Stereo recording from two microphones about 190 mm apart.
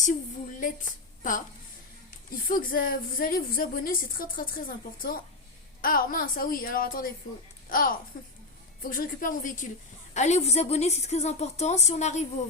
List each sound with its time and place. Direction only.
0.6 s a woman's voice: 45° left (ahead or behind)
2.5 s a woman's voice: 45° left (ahead or behind)